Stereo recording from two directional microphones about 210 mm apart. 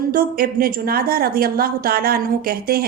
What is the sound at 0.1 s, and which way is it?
A woman's voice, 45° right (ahead or behind).